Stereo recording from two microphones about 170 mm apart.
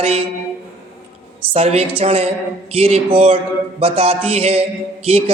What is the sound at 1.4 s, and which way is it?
A man's voice, 35° right (ahead or behind).